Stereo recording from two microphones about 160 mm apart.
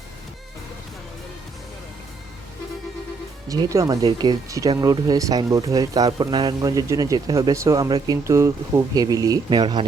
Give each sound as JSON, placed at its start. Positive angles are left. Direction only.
{"t": 3.5, "sound": "speech", "side_deg": -20}